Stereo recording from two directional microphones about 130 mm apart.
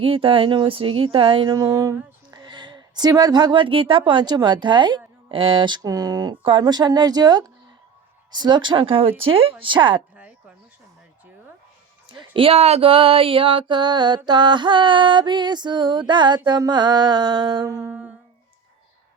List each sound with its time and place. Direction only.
0.0 s speech: 45° right (ahead or behind)
1.5 s speech: 25° right (ahead or behind)
12.1 s speech: 40° right (ahead or behind); by 17.9 s 25° right (ahead or behind)